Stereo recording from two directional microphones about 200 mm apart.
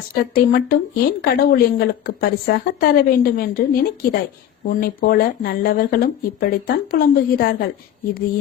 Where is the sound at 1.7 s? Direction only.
50° left (ahead or behind).